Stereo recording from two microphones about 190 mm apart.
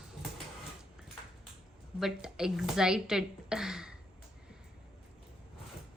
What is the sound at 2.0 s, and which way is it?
Speech, 5° right (ahead or behind).